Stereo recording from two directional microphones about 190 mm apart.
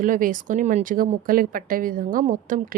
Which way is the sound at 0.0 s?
45° right (ahead or behind).